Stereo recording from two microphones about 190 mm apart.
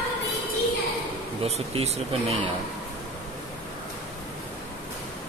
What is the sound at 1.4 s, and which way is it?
Speech, 30° right (ahead or behind).